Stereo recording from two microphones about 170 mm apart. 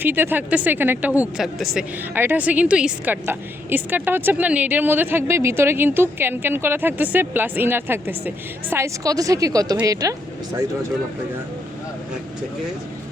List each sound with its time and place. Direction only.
0.0 s a woman's voice: 10° right (ahead or behind)